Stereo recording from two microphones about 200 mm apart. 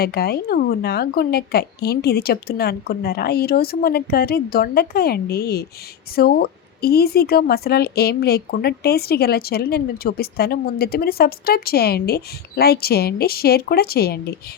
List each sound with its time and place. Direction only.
0.0 s a woman's voice: 50° left (ahead or behind)